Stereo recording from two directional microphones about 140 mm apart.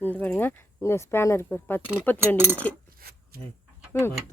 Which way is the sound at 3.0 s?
90° right.